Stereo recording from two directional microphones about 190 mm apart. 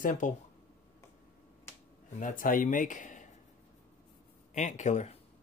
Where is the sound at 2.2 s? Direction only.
45° left (ahead or behind).